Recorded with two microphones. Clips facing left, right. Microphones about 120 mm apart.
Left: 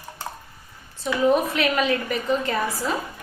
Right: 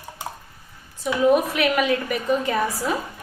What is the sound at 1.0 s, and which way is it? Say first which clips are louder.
Speech: right 2 dB; 10° right (ahead or behind).